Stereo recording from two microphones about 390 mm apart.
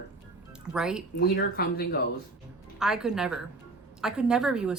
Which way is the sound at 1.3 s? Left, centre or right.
Left.